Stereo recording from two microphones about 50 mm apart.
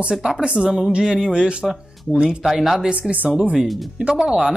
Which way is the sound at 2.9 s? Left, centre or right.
Right.